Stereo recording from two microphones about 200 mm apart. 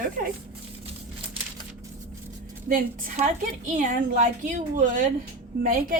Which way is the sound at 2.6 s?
40° right (ahead or behind).